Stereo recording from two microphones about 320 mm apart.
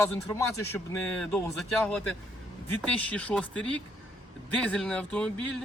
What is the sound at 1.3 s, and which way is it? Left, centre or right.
Speech, centre.